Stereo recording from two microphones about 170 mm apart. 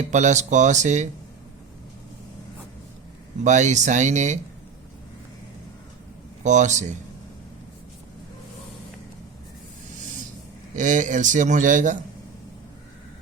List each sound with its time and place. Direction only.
0.0 s a man's voice: 45° right (ahead or behind)
3.4 s a man's voice: 45° right (ahead or behind)
6.4 s speech: 45° right (ahead or behind)
10.8 s a man's voice: 50° right (ahead or behind)